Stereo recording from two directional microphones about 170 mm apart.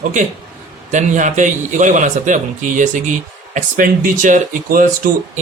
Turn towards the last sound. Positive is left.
turn(degrees=-50)  # may be behind; listen again after turning